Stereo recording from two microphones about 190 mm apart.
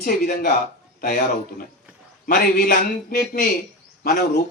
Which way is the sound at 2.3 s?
50° left (ahead or behind).